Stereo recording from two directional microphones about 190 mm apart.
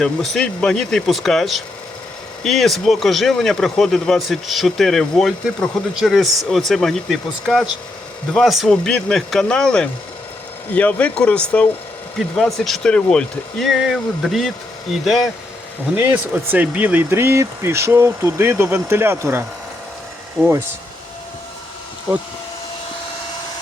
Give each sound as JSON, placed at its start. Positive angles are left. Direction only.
{"t": 0.0, "sound": "speech", "side_deg": 5}
{"t": 16.0, "sound": "speech", "side_deg": -10}